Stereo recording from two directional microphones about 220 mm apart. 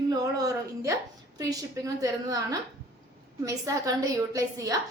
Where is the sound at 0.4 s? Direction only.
15° right (ahead or behind).